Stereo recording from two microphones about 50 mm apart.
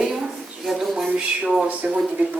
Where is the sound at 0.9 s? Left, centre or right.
Centre.